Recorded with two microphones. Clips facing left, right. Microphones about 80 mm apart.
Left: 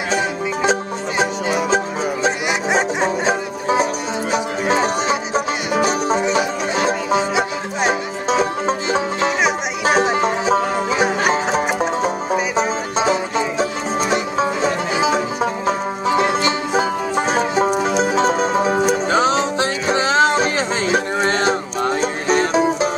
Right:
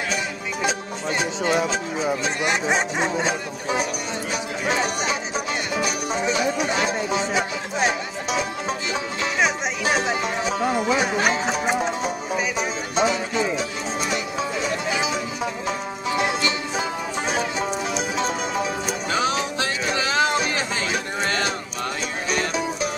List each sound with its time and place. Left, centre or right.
0.7 s music: left
1.4 s music: centre
2.7 s music: left